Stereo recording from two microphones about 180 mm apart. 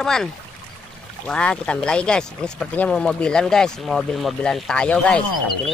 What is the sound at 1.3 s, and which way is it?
Speech, 5° left (ahead or behind).